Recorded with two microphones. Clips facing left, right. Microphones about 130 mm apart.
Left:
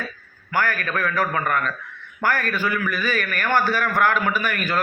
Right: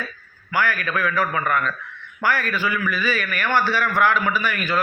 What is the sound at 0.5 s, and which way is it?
A man's voice, 45° left (ahead or behind).